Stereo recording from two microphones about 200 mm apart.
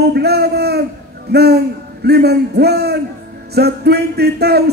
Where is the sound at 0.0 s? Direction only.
55° right (ahead or behind).